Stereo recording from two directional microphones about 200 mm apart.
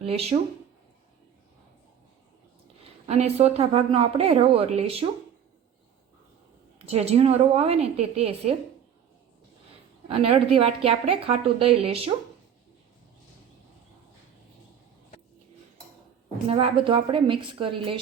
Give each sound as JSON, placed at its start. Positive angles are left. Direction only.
{"t": 0.0, "sound": "a woman's voice", "side_deg": -30}
{"t": 3.1, "sound": "a woman's voice", "side_deg": -30}
{"t": 6.7, "sound": "a woman's voice", "side_deg": -30}
{"t": 10.1, "sound": "a woman's voice", "side_deg": -30}
{"t": 16.5, "sound": "a woman's voice", "side_deg": -25}